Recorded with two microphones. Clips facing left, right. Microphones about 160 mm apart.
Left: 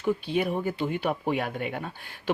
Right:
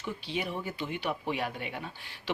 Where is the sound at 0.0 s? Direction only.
50° left (ahead or behind).